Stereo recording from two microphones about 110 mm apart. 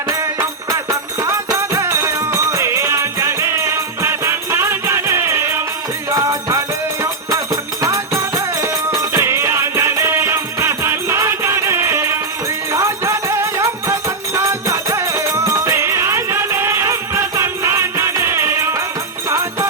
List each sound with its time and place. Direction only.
0.1 s music: 25° right (ahead or behind)